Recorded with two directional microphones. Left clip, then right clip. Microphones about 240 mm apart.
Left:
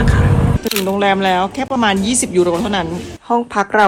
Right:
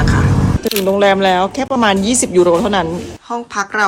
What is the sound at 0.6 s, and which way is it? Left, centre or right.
Speech, centre.